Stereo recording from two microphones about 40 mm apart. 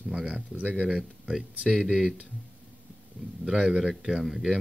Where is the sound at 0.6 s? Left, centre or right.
Right.